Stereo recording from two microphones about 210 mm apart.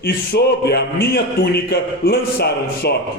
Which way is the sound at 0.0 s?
50° left (ahead or behind).